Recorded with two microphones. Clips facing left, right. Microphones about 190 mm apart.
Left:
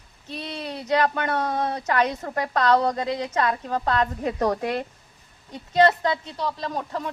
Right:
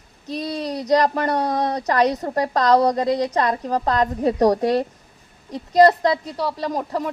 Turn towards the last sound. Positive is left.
turn(degrees=-35)  # may be behind; listen again after turning